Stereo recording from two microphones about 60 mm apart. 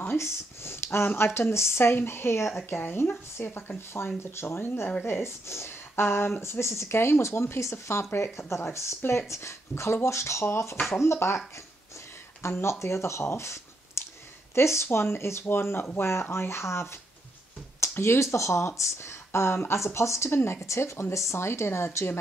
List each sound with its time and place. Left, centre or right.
0.0 s speech: left